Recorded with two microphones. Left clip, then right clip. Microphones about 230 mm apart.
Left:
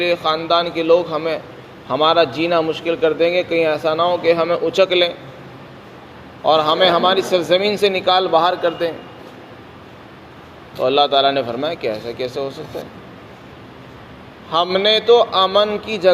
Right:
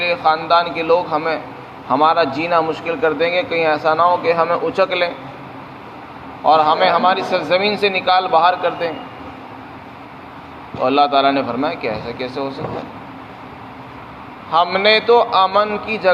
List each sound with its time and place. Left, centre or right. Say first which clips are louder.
0.0 s a man's voice: right 2 dB; left
6.4 s a man's voice: right 1 dB; left
10.8 s a man's voice: right 1 dB; left
14.5 s a man's voice: right 2 dB; left